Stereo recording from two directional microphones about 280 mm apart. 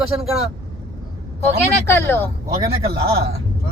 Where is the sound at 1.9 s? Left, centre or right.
Centre.